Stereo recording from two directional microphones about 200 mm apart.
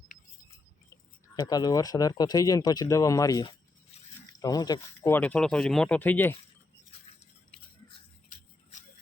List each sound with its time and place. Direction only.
1.4 s speech: 20° left (ahead or behind)